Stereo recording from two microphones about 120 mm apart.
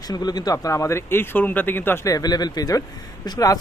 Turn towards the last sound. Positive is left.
turn(degrees=30)  # may be behind; listen again after turning